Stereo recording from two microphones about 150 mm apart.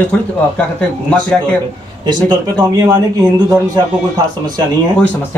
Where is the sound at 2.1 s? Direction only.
30° right (ahead or behind).